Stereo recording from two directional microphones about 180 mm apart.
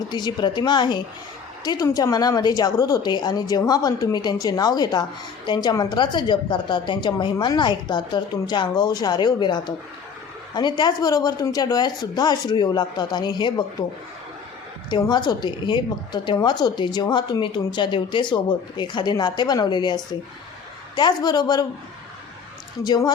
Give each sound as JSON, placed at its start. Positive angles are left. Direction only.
{"t": 0.1, "sound": "a woman's voice", "side_deg": 25}
{"t": 14.8, "sound": "a woman's voice", "side_deg": 25}
{"t": 22.8, "sound": "a woman's voice", "side_deg": 20}